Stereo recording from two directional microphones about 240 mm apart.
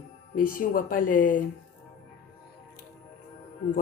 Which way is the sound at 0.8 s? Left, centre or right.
Left.